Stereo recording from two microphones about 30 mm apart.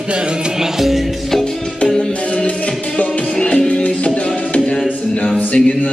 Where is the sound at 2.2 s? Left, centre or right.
Left.